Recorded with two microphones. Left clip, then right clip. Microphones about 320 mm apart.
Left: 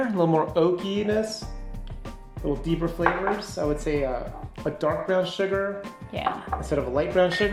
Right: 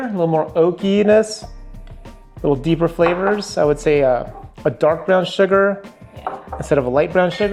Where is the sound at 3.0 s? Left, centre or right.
Right.